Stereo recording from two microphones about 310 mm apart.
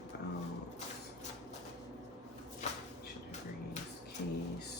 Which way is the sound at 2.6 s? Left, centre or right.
Left.